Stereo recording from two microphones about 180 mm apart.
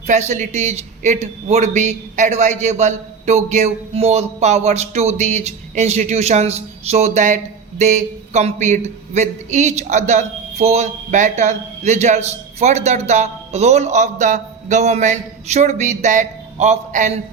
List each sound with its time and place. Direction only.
0.1 s speech: 40° right (ahead or behind)